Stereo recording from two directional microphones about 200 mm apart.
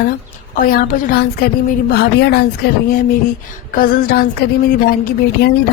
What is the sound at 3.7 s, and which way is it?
Speech, 45° left (ahead or behind).